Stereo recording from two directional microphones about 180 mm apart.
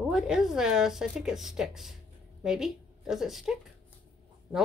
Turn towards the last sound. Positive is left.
turn(degrees=0)  # may be behind; listen again after turning